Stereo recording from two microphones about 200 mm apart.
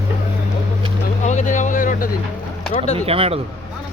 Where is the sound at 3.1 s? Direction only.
30° right (ahead or behind).